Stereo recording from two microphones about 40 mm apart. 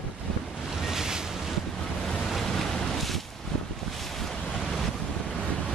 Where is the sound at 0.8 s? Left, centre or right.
Centre.